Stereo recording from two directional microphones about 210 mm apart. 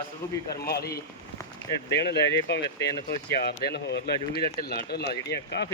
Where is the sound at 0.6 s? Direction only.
50° left (ahead or behind).